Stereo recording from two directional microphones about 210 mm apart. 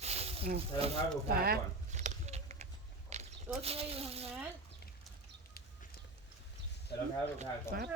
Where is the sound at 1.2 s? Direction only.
45° right (ahead or behind); by 3.3 s 30° right (ahead or behind).